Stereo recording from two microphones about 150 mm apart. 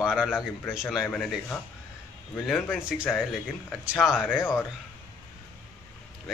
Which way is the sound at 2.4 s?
Centre (ahead or behind).